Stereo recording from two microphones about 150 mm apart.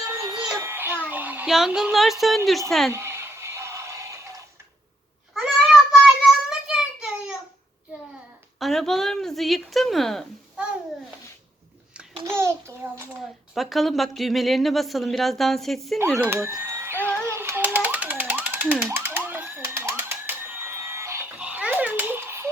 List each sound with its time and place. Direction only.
0.1 s child singing: 25° right (ahead or behind)
0.6 s a woman's voice: 15° right (ahead or behind); by 2.9 s centre (ahead or behind)
2.9 s a sound: 15° right (ahead or behind)
5.9 s child singing: 5° right (ahead or behind)
8.5 s a woman's voice: centre (ahead or behind)
12.4 s a child's voice: 15° right (ahead or behind)
13.5 s a woman's voice: centre (ahead or behind)
16.1 s speech: 15° right (ahead or behind)
17.1 s a sound: 15° right (ahead or behind)